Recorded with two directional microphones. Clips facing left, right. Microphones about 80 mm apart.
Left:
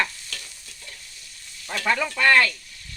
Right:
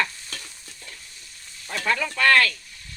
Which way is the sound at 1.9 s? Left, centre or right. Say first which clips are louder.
Even; centre.